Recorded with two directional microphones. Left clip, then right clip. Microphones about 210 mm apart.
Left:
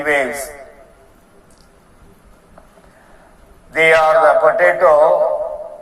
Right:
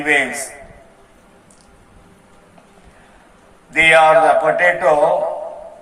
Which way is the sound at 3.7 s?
35° left (ahead or behind).